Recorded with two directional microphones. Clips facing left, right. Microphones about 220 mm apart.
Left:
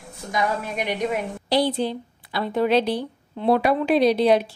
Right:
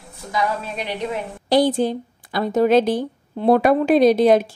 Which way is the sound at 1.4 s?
50° right (ahead or behind).